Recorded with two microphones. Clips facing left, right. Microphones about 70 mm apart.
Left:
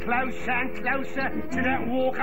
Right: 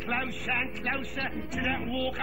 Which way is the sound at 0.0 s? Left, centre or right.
Left.